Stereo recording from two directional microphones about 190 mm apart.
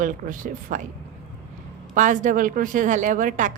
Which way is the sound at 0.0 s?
45° right (ahead or behind).